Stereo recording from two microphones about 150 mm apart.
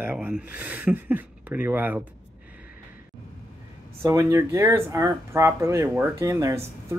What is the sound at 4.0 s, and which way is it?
Speech, 20° right (ahead or behind).